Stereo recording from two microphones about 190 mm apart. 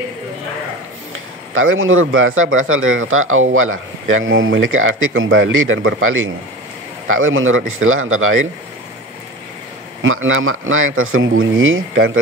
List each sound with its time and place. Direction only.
1.5 s speech: 90° right
10.0 s speech: 90° right